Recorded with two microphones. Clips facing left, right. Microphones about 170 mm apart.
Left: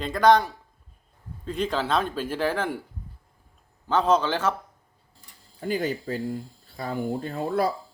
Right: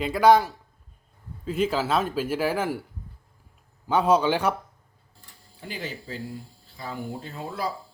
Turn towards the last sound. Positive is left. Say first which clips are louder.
# left 7 dB
turn(degrees=55)  # may be behind; listen again after turning